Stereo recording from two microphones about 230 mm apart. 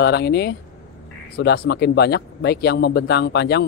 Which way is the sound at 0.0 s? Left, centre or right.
Left.